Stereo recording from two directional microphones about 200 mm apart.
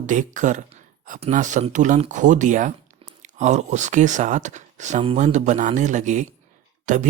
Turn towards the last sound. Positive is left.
turn(degrees=-35)  # may be behind; listen again after turning